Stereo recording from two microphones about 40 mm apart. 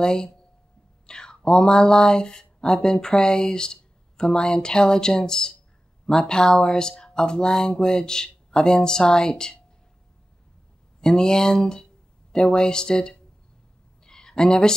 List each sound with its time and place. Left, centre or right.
0.0 s speech: centre
11.0 s speech: centre
14.0 s a sound: centre